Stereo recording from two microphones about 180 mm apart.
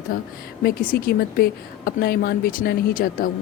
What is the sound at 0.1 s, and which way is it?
A woman's voice, 50° left (ahead or behind).